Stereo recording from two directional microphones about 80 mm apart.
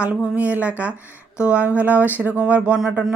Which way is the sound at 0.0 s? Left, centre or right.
Centre.